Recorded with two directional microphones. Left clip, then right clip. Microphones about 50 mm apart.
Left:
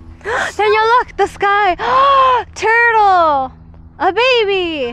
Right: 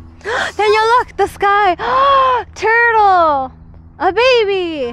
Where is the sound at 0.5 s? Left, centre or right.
Right.